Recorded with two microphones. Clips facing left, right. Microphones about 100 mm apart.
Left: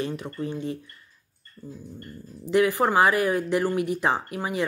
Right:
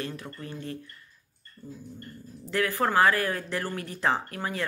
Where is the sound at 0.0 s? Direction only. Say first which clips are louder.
Left 7 dB; 20° left (ahead or behind).